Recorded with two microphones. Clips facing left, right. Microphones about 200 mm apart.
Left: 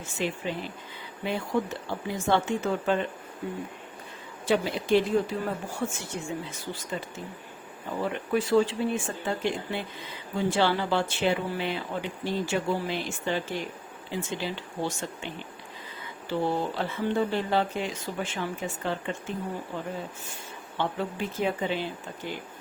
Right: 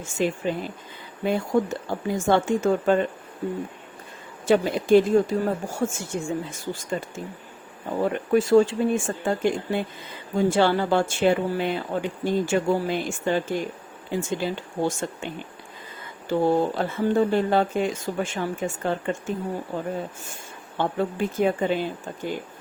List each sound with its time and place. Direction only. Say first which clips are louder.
0.2 s speech: right 6 dB; 45° right (ahead or behind)
4.4 s speech: right 6 dB; 45° right (ahead or behind)
8.0 s speech: right 6 dB; 45° right (ahead or behind)